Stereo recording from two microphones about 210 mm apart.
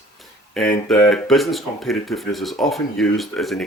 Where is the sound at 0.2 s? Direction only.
Centre (ahead or behind).